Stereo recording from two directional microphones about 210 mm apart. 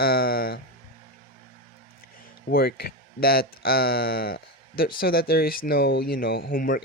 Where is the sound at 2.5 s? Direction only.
45° left (ahead or behind).